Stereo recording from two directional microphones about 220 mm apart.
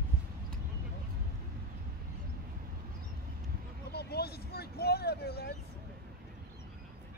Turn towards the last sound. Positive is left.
turn(degrees=45)  # may be behind; listen again after turning